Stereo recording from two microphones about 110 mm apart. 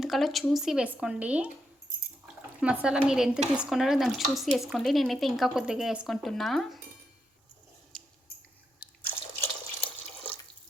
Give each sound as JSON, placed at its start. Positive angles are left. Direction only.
{"t": 0.0, "sound": "speech", "side_deg": 0}
{"t": 7.9, "sound": "scissors", "side_deg": 5}
{"t": 9.0, "sound": "drip", "side_deg": 15}